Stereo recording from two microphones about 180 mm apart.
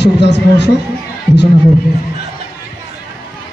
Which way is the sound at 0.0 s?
70° left (ahead or behind).